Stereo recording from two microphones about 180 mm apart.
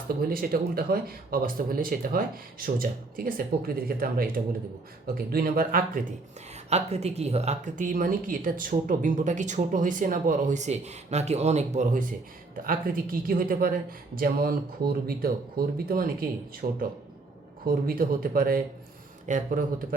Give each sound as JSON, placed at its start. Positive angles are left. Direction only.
{"t": 0.2, "sound": "speech", "side_deg": -55}
{"t": 6.7, "sound": "speech", "side_deg": -35}